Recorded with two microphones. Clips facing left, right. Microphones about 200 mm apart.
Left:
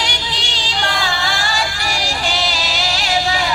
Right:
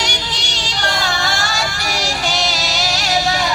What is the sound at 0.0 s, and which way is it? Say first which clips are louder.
Music: right 1 dB; 45° right (ahead or behind).